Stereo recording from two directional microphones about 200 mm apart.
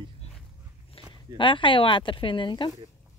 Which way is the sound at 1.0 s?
25° left (ahead or behind).